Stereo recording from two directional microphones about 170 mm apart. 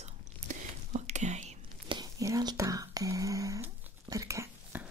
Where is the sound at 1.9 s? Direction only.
20° right (ahead or behind).